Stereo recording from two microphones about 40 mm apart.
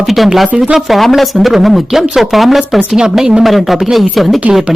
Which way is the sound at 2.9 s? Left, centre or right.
Centre.